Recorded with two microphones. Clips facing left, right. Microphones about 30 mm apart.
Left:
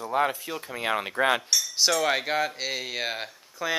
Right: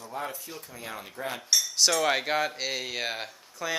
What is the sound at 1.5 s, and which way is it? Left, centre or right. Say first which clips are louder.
Cutlery: even; centre.